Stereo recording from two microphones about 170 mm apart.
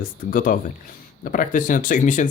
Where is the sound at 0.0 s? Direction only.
55° left (ahead or behind).